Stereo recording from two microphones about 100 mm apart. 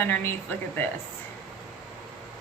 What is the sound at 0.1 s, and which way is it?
Speech, 25° left (ahead or behind).